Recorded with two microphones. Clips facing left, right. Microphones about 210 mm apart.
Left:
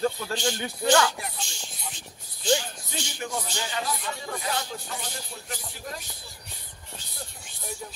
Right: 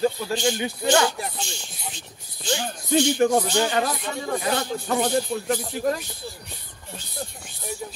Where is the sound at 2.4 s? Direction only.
55° right (ahead or behind).